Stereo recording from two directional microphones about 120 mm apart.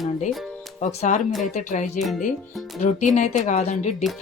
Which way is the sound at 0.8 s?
80° left.